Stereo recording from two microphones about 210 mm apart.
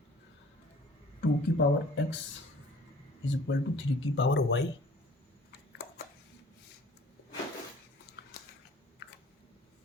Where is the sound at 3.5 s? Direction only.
60° left (ahead or behind).